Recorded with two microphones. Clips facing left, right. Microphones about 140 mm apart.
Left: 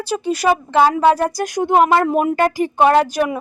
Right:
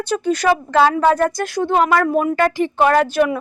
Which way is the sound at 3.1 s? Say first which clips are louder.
Right 2 dB; 10° left (ahead or behind).